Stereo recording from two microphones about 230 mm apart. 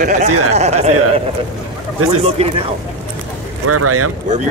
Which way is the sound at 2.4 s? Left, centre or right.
Right.